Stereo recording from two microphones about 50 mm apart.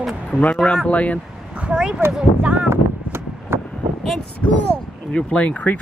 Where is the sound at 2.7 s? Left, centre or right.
Right.